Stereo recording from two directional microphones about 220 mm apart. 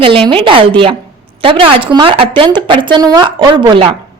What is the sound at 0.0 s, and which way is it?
Speech, 25° right (ahead or behind).